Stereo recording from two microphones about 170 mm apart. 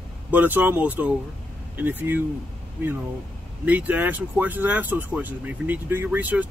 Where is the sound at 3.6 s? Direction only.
10° right (ahead or behind).